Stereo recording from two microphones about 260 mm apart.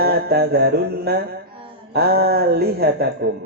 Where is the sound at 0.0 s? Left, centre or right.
Right.